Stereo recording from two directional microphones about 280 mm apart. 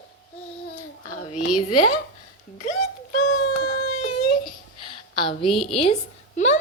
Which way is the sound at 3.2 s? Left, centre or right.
Left.